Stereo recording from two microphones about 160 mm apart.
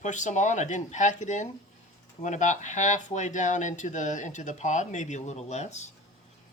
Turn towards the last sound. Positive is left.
turn(degrees=45)  # may be behind; listen again after turning